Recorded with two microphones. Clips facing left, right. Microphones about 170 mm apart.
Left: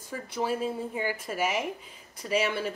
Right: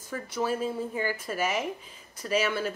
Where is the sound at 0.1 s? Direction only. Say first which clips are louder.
Right 1 dB; 25° left (ahead or behind).